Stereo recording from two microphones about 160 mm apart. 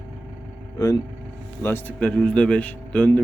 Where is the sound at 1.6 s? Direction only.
15° left (ahead or behind).